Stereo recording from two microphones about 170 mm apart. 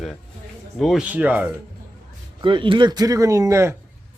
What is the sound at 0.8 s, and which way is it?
Speech, centre (ahead or behind).